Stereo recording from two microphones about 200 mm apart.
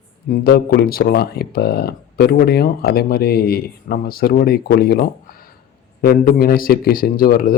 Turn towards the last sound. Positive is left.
turn(degrees=45)  # may be behind; listen again after turning